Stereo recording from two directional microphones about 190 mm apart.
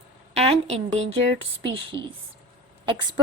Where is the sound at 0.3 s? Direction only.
30° right (ahead or behind).